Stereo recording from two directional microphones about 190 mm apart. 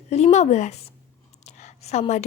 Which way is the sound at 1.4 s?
35° left (ahead or behind).